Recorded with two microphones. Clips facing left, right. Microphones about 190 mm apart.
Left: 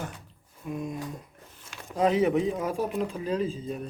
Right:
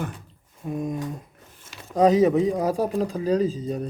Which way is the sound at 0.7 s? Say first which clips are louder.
Right 5 dB; 35° right (ahead or behind).